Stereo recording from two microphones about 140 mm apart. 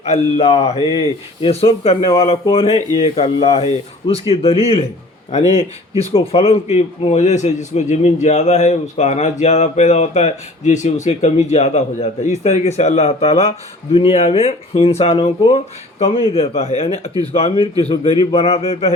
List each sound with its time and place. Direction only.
0.0 s a man's voice: 50° left (ahead or behind)
6.1 s a man's voice: 45° left (ahead or behind)